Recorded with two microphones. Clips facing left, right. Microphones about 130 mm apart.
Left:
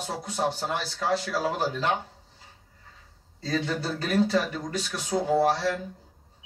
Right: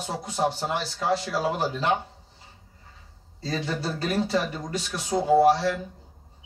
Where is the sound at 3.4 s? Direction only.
20° right (ahead or behind).